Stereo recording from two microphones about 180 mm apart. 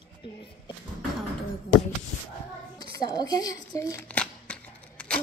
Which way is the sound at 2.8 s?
20° left (ahead or behind).